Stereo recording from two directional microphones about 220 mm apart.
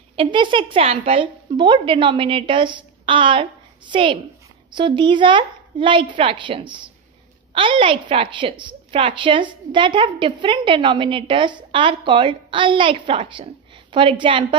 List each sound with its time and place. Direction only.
0.1 s a woman's voice: 25° right (ahead or behind)